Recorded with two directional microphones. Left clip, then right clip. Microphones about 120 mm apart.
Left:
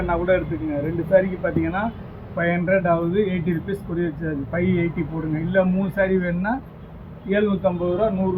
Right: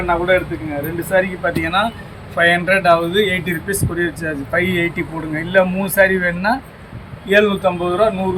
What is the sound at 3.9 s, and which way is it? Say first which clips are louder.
Speech: right 5 dB; 45° right (ahead or behind).